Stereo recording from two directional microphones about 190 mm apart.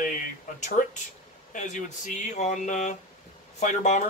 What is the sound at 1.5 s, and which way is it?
Speech, 40° left (ahead or behind).